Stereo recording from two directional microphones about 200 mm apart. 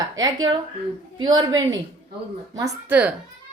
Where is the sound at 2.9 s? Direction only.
10° right (ahead or behind).